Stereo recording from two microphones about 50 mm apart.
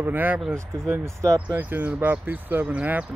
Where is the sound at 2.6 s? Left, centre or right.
Right.